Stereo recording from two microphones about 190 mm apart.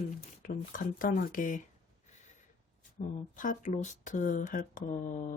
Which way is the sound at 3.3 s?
45° left (ahead or behind).